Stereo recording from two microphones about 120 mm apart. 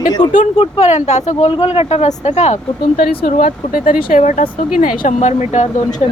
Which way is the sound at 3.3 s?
90° left.